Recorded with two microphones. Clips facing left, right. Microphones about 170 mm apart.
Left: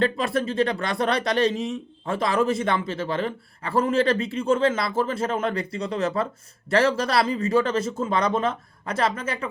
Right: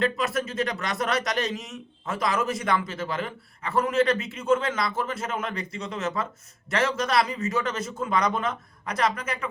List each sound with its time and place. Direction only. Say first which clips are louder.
0.0 s a man's voice: left 3 dB; 30° left (ahead or behind)